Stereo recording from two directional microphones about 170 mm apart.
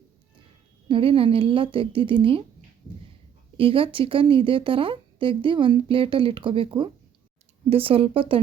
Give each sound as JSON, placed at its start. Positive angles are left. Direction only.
{"t": 0.9, "sound": "speech", "side_deg": -30}
{"t": 3.6, "sound": "speech", "side_deg": -30}